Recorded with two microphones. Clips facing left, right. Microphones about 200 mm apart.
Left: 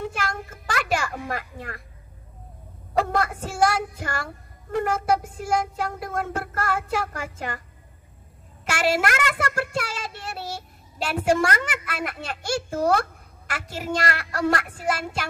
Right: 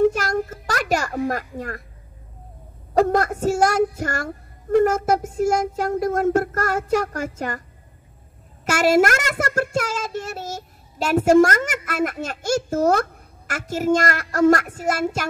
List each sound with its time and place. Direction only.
0.1 s a sound: 40° right (ahead or behind)
2.9 s child singing: 40° right (ahead or behind)
8.6 s child singing: 40° right (ahead or behind)